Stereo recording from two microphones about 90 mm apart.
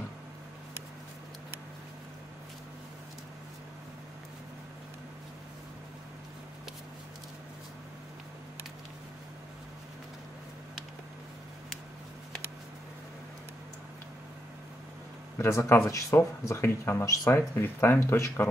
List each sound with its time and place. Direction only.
15.3 s speech: 30° left (ahead or behind)